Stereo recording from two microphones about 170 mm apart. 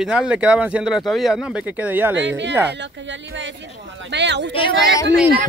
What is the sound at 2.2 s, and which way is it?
Speech, 90° right.